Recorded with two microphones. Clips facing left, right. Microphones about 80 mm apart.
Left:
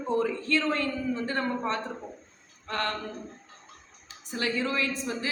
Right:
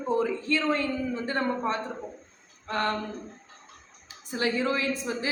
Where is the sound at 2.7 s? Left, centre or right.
Centre.